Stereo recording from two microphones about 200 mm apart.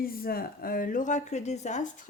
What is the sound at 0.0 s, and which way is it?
Speech, 45° left (ahead or behind).